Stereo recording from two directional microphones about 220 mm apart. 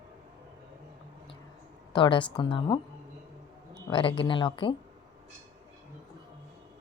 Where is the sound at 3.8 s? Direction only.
20° left (ahead or behind).